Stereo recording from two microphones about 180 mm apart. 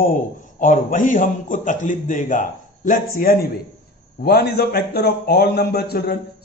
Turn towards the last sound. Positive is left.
turn(degrees=60)  # may be behind; listen again after turning